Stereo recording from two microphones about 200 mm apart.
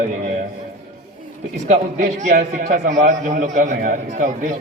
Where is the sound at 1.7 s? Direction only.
35° right (ahead or behind).